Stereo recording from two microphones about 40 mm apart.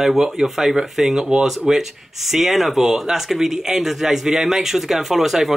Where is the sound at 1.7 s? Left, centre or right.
Centre.